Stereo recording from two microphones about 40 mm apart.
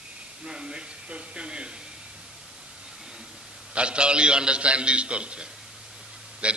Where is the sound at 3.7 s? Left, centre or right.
Right.